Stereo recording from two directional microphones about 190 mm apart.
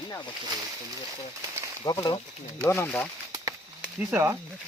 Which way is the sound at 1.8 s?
20° left (ahead or behind).